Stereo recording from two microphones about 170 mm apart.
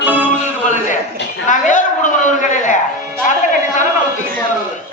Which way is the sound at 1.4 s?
50° left (ahead or behind).